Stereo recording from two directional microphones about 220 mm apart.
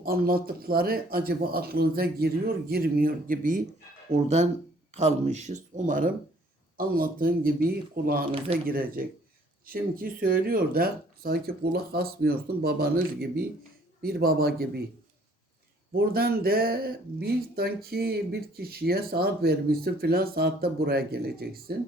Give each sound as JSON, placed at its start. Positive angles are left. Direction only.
{"t": 0.0, "sound": "speech", "side_deg": -40}
{"t": 16.0, "sound": "speech", "side_deg": -45}